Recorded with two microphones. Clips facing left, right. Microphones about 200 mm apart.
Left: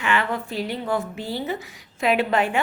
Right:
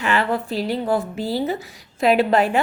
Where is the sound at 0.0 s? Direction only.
35° right (ahead or behind).